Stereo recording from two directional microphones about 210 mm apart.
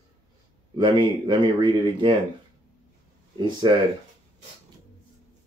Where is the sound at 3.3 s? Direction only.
20° right (ahead or behind).